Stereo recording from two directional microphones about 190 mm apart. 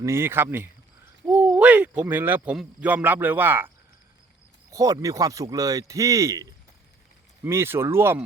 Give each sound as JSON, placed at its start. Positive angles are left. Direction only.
{"t": 0.0, "sound": "speech", "side_deg": -15}
{"t": 4.7, "sound": "speech", "side_deg": -15}